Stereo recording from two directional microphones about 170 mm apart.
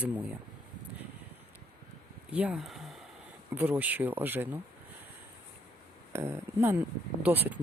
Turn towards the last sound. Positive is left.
turn(degrees=-10)  # may be behind; listen again after turning